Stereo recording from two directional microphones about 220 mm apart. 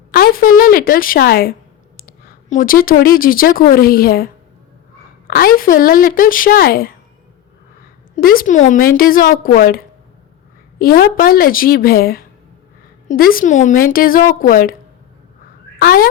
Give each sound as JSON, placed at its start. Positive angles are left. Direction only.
{"t": 0.1, "sound": "a woman's voice", "side_deg": 40}
{"t": 5.3, "sound": "a woman's voice", "side_deg": 40}
{"t": 8.1, "sound": "a woman's voice", "side_deg": 40}
{"t": 15.8, "sound": "speech", "side_deg": 45}